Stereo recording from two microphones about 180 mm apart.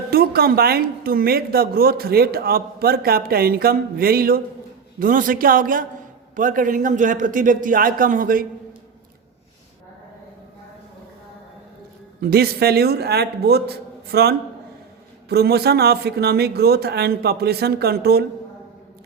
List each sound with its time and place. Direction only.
0.1 s a woman's voice: 55° right (ahead or behind)
12.2 s a woman's voice: 60° right (ahead or behind)